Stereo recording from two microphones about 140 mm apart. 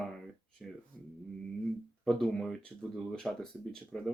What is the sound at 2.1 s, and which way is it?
Speech, 5° left (ahead or behind).